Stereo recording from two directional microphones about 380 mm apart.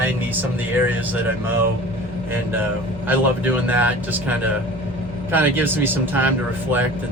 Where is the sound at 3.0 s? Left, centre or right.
Centre.